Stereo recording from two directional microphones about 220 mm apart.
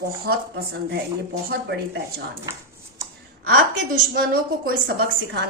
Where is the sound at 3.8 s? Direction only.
45° right (ahead or behind).